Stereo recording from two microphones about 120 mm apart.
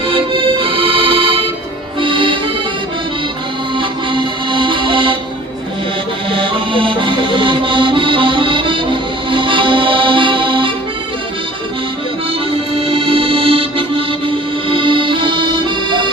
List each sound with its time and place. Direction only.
0.1 s accordion: 45° right (ahead or behind)
3.8 s music: 45° right (ahead or behind)
6.3 s music: 45° right (ahead or behind)
12.9 s music: 50° right (ahead or behind)
14.7 s accordion: 45° right (ahead or behind)